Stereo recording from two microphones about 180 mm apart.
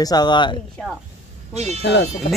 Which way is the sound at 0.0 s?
20° left (ahead or behind).